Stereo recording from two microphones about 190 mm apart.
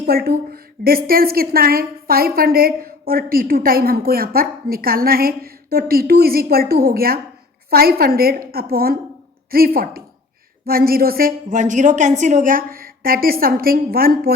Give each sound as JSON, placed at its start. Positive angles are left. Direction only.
{"t": 0.0, "sound": "a woman's voice", "side_deg": -55}